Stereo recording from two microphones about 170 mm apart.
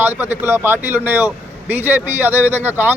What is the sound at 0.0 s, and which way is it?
Speech, 10° right (ahead or behind).